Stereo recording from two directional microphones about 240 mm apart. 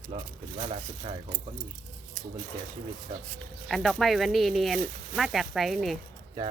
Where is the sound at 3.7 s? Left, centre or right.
Centre.